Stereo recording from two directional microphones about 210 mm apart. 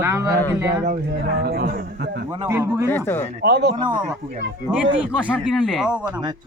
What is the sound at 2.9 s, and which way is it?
Speech, 10° left (ahead or behind).